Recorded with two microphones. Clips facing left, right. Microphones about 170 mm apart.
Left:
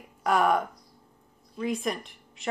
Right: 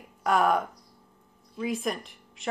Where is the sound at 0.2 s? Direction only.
Centre (ahead or behind).